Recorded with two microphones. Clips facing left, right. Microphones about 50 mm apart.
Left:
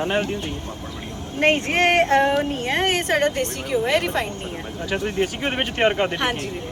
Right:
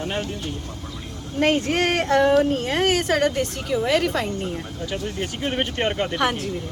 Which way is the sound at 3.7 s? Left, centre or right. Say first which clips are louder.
Even; left.